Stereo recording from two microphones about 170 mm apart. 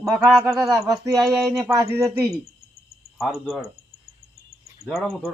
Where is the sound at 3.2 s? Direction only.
Centre (ahead or behind).